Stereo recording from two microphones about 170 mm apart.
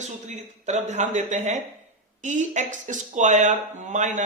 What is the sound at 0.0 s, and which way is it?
Speech, 45° right (ahead or behind).